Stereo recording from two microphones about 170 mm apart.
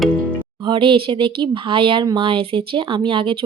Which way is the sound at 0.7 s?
30° right (ahead or behind).